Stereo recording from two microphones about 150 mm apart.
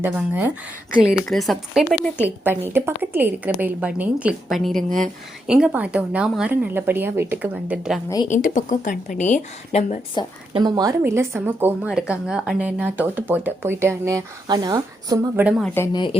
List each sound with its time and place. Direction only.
0.0 s a woman's voice: 10° right (ahead or behind)
1.2 s a woman's voice: centre (ahead or behind)
2.4 s a woman's voice: 15° right (ahead or behind); by 4.9 s centre (ahead or behind)
4.9 s speech: 60° right (ahead or behind)
5.5 s a woman's voice: 5° right (ahead or behind)
8.3 s a woman's voice: 60° left (ahead or behind)
10.5 s speech: 25° right (ahead or behind)
11.0 s a woman's voice: 15° right (ahead or behind)
15.4 s a woman's voice: 10° right (ahead or behind)
15.6 s speech: 15° left (ahead or behind)
15.9 s a woman's voice: 30° left (ahead or behind)